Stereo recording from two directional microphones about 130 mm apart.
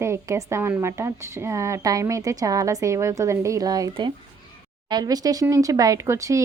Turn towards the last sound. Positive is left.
turn(degrees=-25)  # may be behind; listen again after turning